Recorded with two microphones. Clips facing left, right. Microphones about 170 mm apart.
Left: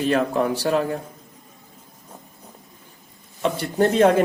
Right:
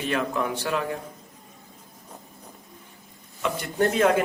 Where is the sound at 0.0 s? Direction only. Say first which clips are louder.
Left 6 dB; 35° left (ahead or behind).